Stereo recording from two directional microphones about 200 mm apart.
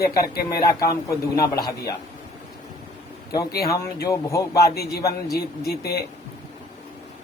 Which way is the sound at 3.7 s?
15° left (ahead or behind).